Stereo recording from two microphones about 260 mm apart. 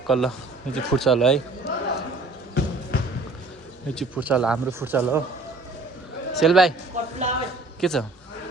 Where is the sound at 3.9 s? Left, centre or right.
Centre.